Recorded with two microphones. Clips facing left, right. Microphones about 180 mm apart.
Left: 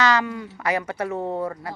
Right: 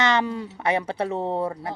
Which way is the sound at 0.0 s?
25° right (ahead or behind).